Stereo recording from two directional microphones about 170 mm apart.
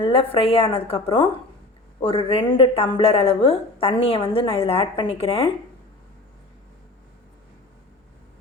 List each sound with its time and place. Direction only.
0.0 s a woman's voice: 35° left (ahead or behind)